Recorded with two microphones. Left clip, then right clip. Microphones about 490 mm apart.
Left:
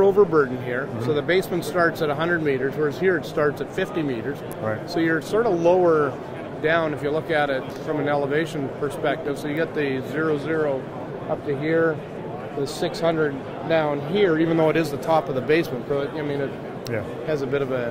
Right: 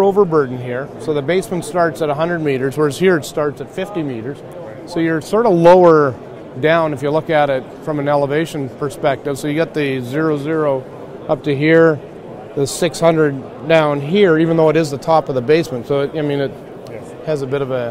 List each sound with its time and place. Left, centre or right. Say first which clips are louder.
0.0 s speech: right 4 dB; right
3.3 s speech: right 3 dB; right
4.9 s speech: right 6 dB; right
6.6 s speech: right 7 dB; right
12.6 s speech: right 9 dB; right